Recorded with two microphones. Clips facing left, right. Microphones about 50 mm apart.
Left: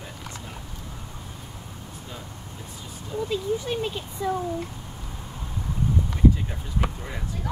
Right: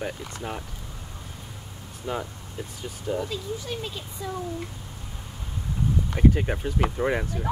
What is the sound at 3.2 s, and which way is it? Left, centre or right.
Speech, centre.